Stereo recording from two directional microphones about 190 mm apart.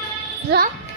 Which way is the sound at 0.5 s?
60° right (ahead or behind).